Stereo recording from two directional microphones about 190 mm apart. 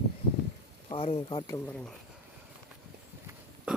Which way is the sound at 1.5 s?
10° left (ahead or behind).